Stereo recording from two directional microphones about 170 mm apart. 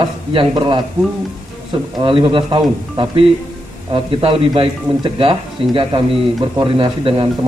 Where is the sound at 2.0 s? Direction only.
30° right (ahead or behind).